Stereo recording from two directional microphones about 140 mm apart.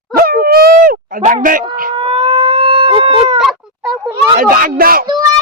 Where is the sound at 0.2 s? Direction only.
90° right.